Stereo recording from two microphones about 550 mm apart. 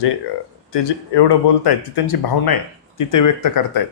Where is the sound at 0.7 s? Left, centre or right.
Left.